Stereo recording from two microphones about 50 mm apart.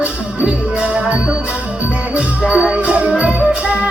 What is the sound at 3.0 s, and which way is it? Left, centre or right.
Music, centre.